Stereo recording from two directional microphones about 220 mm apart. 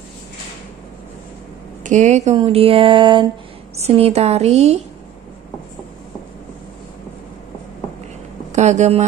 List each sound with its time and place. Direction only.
1.8 s speech: 35° right (ahead or behind)
8.5 s speech: 30° right (ahead or behind)